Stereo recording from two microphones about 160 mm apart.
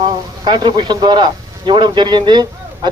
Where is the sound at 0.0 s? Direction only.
25° right (ahead or behind).